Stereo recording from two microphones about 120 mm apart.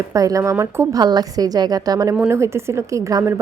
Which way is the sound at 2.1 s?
20° right (ahead or behind).